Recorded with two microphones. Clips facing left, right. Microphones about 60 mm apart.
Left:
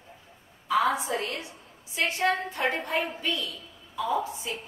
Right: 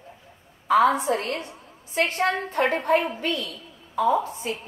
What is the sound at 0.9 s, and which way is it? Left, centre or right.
A woman's voice, right.